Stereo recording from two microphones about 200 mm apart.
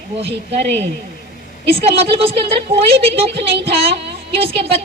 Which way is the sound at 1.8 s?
30° right (ahead or behind).